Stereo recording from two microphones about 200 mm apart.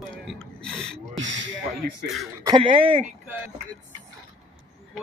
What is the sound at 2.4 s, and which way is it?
Speech, 25° right (ahead or behind).